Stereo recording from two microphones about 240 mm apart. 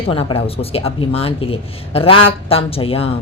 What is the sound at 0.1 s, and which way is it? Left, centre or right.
Speech, left.